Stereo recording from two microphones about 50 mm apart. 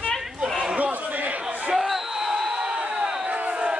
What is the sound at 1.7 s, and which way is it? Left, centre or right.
Basketball bounce, centre.